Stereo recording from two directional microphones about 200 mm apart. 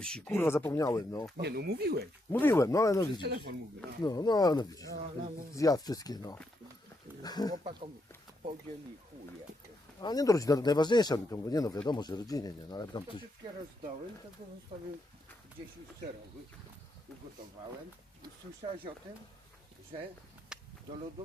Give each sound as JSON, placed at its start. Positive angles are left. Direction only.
{"t": 0.0, "sound": "speech", "side_deg": 5}
{"t": 1.4, "sound": "speech", "side_deg": -55}
{"t": 2.3, "sound": "speech", "side_deg": 10}
{"t": 3.2, "sound": "speech", "side_deg": -60}
{"t": 4.0, "sound": "speech", "side_deg": 20}
{"t": 10.0, "sound": "speech", "side_deg": 20}
{"t": 18.2, "sound": "speech", "side_deg": -30}
{"t": 20.5, "sound": "a sound", "side_deg": -5}